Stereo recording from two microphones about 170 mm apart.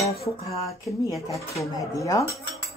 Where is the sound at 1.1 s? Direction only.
20° left (ahead or behind).